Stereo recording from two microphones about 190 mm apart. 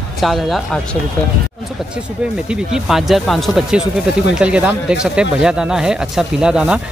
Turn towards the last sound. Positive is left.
turn(degrees=-5)  # may be behind; listen again after turning